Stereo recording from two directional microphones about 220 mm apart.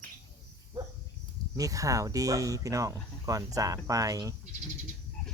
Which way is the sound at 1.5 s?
15° right (ahead or behind).